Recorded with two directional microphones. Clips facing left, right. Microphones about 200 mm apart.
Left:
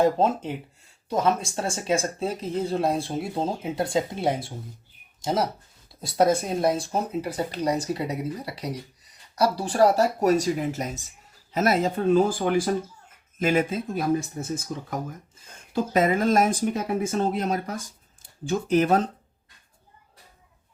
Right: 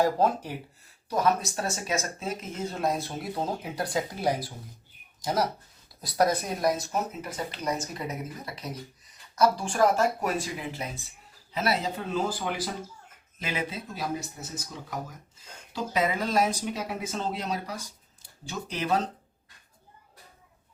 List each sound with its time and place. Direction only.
0.0 s speech: 25° left (ahead or behind); by 19.0 s 50° left (ahead or behind)